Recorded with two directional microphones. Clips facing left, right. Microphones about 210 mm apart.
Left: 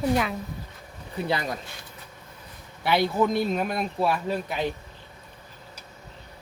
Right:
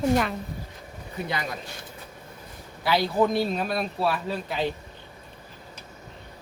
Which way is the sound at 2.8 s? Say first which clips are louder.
Even; 20° left (ahead or behind).